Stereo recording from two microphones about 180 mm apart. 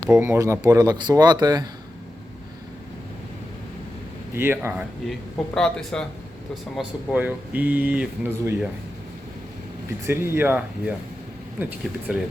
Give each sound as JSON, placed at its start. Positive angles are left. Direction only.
{"t": 0.1, "sound": "speech", "side_deg": -15}
{"t": 4.4, "sound": "speech", "side_deg": -10}
{"t": 5.5, "sound": "speech", "side_deg": 5}
{"t": 10.1, "sound": "speech", "side_deg": -10}